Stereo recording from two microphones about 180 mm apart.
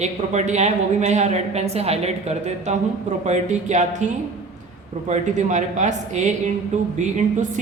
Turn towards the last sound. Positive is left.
turn(degrees=-45)  # may be behind; listen again after turning